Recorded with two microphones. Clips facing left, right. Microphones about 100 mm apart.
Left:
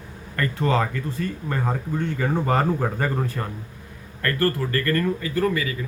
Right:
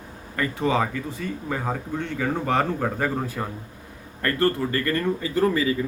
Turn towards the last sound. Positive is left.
turn(degrees=-25)  # may be behind; listen again after turning